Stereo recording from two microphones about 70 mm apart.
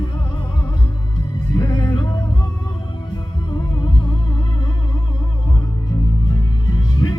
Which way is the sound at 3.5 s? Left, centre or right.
Left.